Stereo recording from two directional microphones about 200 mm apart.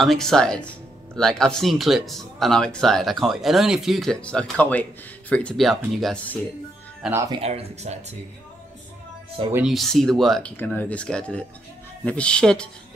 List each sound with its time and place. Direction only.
0.0 s speech: centre (ahead or behind)
7.0 s speech: 10° right (ahead or behind)
7.3 s speech: 30° right (ahead or behind)
9.5 s speech: 5° right (ahead or behind)